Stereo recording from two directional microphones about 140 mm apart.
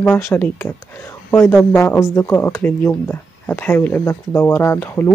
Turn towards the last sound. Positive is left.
turn(degrees=15)  # may be behind; listen again after turning